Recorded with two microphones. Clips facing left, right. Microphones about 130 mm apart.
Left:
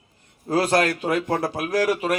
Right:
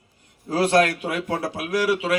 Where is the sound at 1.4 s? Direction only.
45° left (ahead or behind).